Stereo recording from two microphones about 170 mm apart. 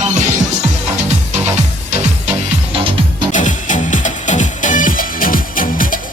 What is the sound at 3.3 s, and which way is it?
Music, 45° left (ahead or behind).